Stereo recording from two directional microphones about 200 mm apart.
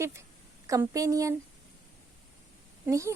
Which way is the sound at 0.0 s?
15° right (ahead or behind).